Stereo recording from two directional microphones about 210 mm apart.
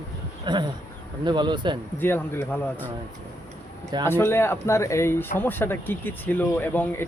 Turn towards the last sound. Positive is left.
turn(degrees=10)  # may be behind; listen again after turning